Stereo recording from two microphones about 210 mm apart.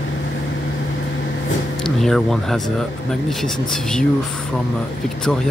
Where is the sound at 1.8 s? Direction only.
Centre (ahead or behind).